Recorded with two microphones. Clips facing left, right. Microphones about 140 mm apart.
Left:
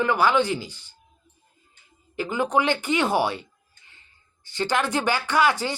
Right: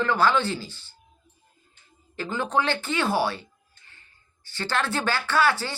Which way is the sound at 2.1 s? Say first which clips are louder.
Left 3 dB; 15° left (ahead or behind).